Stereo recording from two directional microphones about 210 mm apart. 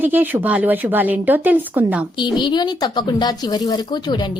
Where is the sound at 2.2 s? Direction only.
20° left (ahead or behind).